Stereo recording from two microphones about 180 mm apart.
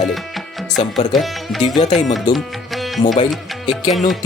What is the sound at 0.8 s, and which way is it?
Speech, 30° left (ahead or behind).